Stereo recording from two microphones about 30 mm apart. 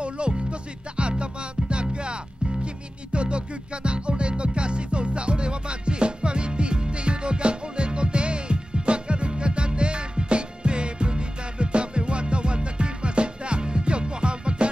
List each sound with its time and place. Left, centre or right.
0.0 s music: right